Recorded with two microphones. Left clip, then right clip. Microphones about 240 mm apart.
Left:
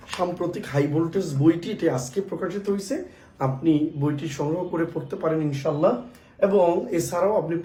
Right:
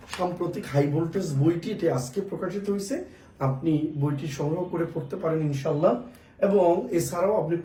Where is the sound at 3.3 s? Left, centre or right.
Centre.